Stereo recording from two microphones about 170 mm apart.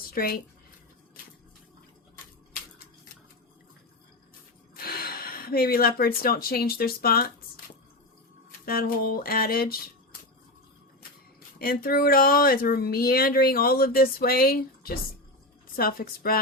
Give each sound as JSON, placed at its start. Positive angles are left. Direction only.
{"t": 0.0, "sound": "a sound", "side_deg": 60}
{"t": 4.7, "sound": "speech", "side_deg": 65}
{"t": 8.6, "sound": "speech", "side_deg": 60}
{"t": 11.6, "sound": "speech", "side_deg": 60}